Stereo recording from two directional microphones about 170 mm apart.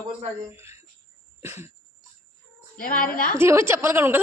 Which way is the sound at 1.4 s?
15° right (ahead or behind).